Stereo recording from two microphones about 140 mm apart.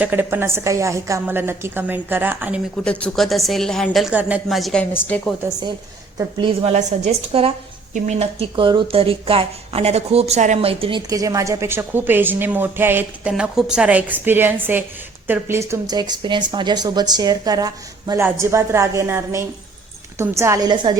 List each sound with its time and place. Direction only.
0.0 s a woman's voice: 15° right (ahead or behind)
2.8 s a woman's voice: 5° left (ahead or behind)
4.1 s a woman's voice: 10° right (ahead or behind)
4.4 s a woman's voice: centre (ahead or behind)
6.3 s a woman's voice: 40° right (ahead or behind)
6.7 s speech: 55° right (ahead or behind)
11.1 s a woman's voice: 25° right (ahead or behind)
16.0 s a woman's voice: 30° right (ahead or behind)